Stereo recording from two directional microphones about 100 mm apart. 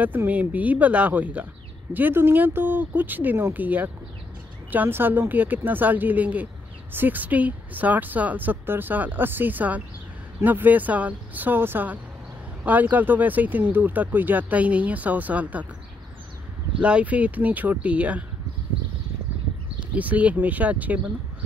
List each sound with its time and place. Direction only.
0.0 s speech: 20° right (ahead or behind)
16.8 s speech: 15° right (ahead or behind)
19.8 s speech: 15° right (ahead or behind)